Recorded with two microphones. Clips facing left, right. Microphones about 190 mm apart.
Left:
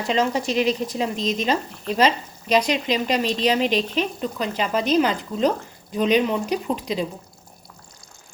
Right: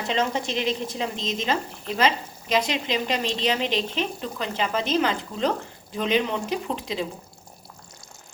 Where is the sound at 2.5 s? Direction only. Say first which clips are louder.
Left 4 dB; 15° left (ahead or behind).